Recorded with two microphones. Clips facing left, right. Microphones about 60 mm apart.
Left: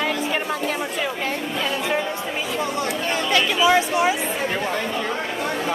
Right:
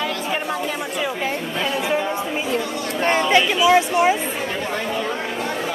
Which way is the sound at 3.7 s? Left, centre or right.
Right.